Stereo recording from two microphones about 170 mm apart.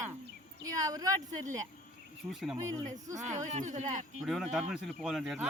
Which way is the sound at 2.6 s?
20° right (ahead or behind).